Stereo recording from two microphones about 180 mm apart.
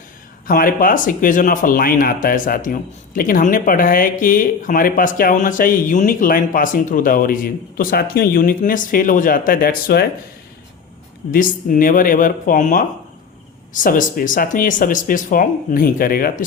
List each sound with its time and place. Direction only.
0.4 s speech: 50° left (ahead or behind)
11.3 s speech: 50° left (ahead or behind)